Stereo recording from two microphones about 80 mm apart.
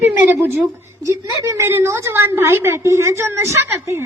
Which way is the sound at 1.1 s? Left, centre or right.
Right.